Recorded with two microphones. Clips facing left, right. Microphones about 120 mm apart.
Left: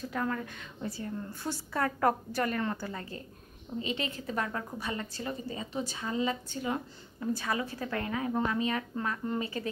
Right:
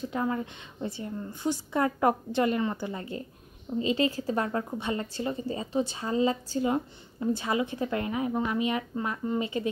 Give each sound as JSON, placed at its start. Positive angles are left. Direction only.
{"t": 0.1, "sound": "speech", "side_deg": -20}